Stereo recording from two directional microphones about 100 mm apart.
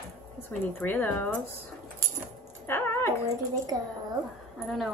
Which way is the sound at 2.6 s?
25° left (ahead or behind).